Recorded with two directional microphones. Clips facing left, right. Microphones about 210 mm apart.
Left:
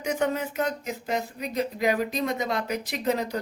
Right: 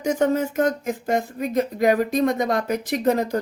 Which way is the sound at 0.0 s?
40° right (ahead or behind).